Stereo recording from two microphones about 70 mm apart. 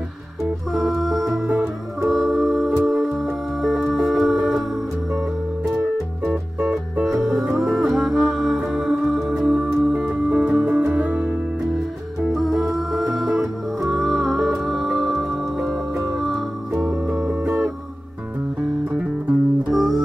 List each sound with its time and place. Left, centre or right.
0.7 s music: centre
1.5 s music: right
2.0 s music: centre
5.7 s music: centre
6.6 s music: centre
7.1 s music: centre
10.8 s music: right
12.3 s music: centre
16.9 s music: right
18.9 s music: centre
19.7 s music: centre